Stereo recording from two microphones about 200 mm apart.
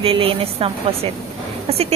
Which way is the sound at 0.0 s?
25° right (ahead or behind).